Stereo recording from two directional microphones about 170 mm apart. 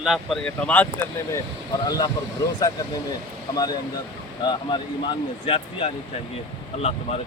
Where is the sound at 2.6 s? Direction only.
20° left (ahead or behind).